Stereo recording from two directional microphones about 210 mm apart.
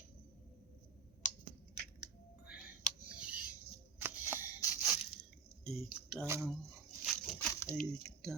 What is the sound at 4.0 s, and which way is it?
Shuffling cards, 10° right (ahead or behind).